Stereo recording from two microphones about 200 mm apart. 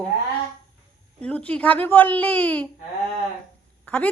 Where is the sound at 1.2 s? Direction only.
5° left (ahead or behind).